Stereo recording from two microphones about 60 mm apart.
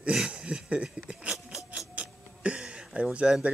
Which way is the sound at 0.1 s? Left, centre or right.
Centre.